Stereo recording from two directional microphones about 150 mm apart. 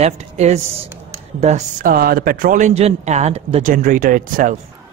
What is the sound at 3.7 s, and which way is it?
Speech, 65° right (ahead or behind).